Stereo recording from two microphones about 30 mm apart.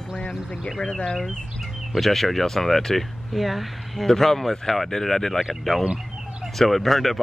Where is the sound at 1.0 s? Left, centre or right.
Centre.